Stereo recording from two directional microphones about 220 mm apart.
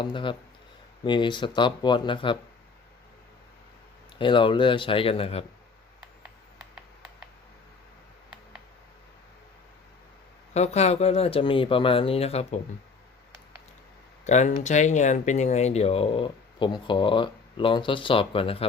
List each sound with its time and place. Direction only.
0.0 s speech: 20° left (ahead or behind)
4.2 s speech: 20° left (ahead or behind)
10.5 s speech: 30° left (ahead or behind)
14.3 s speech: 35° left (ahead or behind)